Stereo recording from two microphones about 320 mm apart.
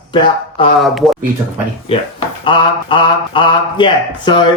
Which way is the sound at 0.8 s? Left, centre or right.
Centre.